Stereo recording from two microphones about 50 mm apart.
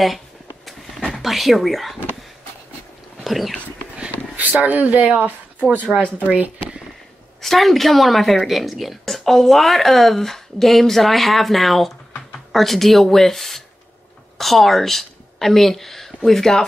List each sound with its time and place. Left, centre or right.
1.2 s a woman's voice: centre
3.3 s speech: centre
4.4 s speech: right
7.4 s a woman's voice: centre